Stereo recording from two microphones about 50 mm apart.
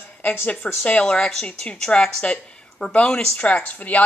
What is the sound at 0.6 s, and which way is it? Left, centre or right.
A woman's voice, left.